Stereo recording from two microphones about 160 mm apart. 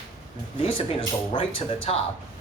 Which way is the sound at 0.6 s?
35° left (ahead or behind).